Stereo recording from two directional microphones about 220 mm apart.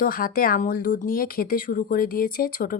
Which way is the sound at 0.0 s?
40° left (ahead or behind).